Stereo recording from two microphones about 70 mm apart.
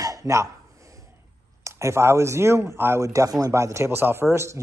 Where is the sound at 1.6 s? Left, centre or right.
Right.